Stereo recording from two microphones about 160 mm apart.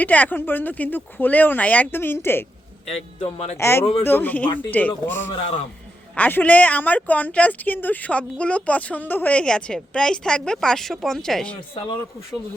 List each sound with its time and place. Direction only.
0.0 s speech: 10° left (ahead or behind)
3.2 s speech: 40° left (ahead or behind)
3.6 s speech: 15° left (ahead or behind)